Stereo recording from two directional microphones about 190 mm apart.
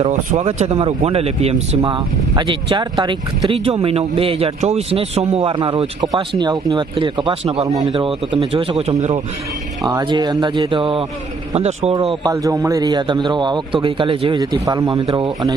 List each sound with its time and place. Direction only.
0.0 s a man's voice: 35° right (ahead or behind)
9.8 s a man's voice: 20° right (ahead or behind)
12.2 s a man's voice: 15° right (ahead or behind)